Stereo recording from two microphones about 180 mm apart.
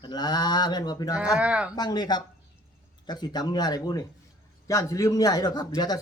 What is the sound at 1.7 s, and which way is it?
Mantra, 25° left (ahead or behind).